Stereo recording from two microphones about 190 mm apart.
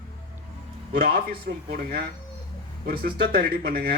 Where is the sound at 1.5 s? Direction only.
55° right (ahead or behind).